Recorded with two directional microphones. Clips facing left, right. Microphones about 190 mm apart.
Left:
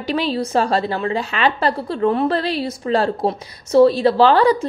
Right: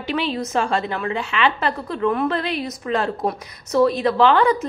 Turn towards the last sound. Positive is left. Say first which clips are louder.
# left 3 dB
turn(degrees=35)  # may be behind; listen again after turning